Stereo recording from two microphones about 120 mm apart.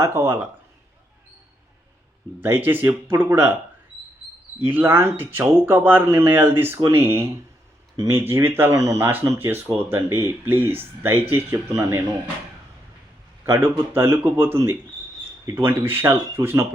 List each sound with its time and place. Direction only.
0.0 s speech: 20° right (ahead or behind)
2.4 s speech: 15° right (ahead or behind)
4.6 s speech: 15° right (ahead or behind)
13.4 s speech: 20° right (ahead or behind)